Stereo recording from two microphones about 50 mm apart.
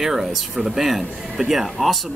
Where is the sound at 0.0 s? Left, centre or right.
Centre.